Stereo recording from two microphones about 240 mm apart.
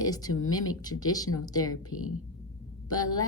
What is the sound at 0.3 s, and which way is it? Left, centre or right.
Speech, left.